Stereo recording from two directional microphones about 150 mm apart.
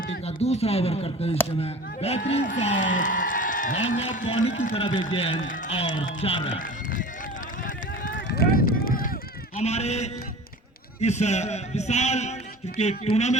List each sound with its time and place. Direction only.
0.3 s a man's voice: 45° left (ahead or behind)
2.4 s a woman's voice: 55° left (ahead or behind)
4.7 s speech: 35° left (ahead or behind)
6.6 s run: 65° left (ahead or behind)
8.0 s run: 75° left (ahead or behind)
9.6 s a man's voice: 45° left (ahead or behind)